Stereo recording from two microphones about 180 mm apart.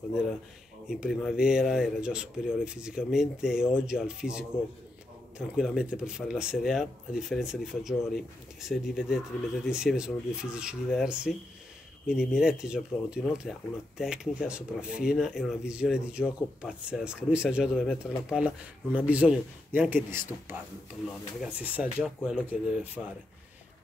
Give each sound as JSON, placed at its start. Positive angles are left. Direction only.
{"t": 0.8, "sound": "speech", "side_deg": -5}
{"t": 5.6, "sound": "speech", "side_deg": -5}
{"t": 21.4, "sound": "speech", "side_deg": -10}